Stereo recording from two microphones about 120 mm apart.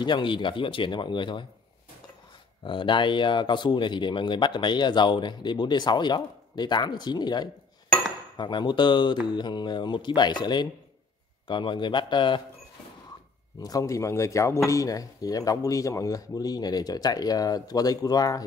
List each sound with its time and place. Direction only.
0.0 s speech: 40° left (ahead or behind)
2.6 s speech: 45° left (ahead or behind)
13.6 s speech: 30° left (ahead or behind)